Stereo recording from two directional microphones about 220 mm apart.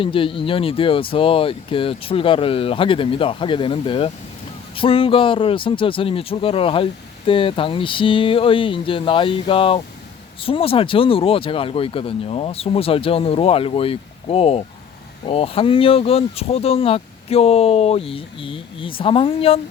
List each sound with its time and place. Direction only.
0.0 s speech: 25° left (ahead or behind)